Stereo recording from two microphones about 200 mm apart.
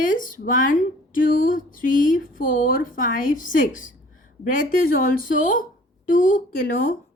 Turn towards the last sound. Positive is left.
turn(degrees=45)  # may be behind; listen again after turning